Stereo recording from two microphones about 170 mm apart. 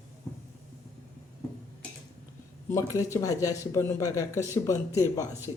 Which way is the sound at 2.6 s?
20° left (ahead or behind).